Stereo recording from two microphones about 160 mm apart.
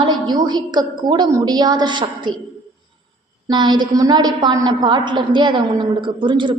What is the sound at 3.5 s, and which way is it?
A woman's voice, 30° right (ahead or behind).